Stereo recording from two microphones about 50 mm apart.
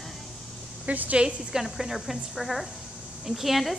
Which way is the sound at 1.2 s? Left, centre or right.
Centre.